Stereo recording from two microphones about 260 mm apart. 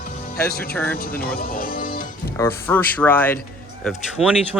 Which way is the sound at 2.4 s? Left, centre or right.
Centre.